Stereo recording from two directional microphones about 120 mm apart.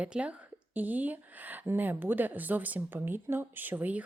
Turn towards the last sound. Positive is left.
turn(degrees=-15)  # may be behind; listen again after turning